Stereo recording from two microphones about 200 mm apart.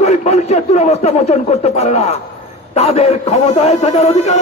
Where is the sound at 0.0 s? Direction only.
35° left (ahead or behind).